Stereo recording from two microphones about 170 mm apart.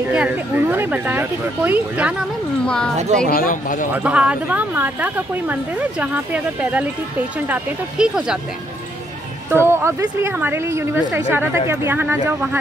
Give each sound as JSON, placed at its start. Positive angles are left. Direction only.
{"t": 0.1, "sound": "speech", "side_deg": -10}
{"t": 2.6, "sound": "speech", "side_deg": 5}
{"t": 3.3, "sound": "speech", "side_deg": 55}
{"t": 3.9, "sound": "speech", "side_deg": -10}
{"t": 9.5, "sound": "speech", "side_deg": -15}